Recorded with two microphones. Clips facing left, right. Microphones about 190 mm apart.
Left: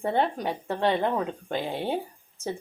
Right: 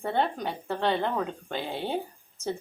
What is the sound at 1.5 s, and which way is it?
Speech, 45° left (ahead or behind).